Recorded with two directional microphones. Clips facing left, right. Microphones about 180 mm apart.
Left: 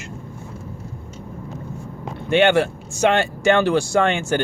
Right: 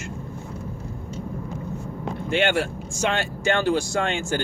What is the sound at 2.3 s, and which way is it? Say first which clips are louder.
Speech: left 7 dB; 65° left (ahead or behind).